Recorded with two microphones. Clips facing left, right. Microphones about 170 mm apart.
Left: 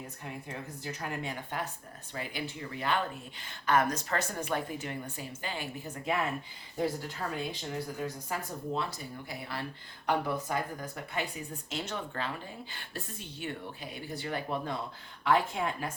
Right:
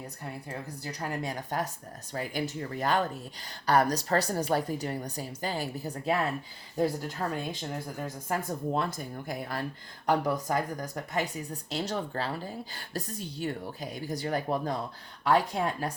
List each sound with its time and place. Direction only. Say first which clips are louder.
0.3 s speech: right 2 dB; 35° right (ahead or behind)